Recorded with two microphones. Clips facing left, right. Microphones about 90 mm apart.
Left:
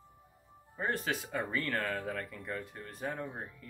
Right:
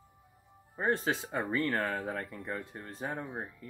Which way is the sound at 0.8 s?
25° right (ahead or behind).